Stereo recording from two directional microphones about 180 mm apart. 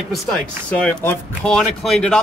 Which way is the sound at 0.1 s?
5° left (ahead or behind).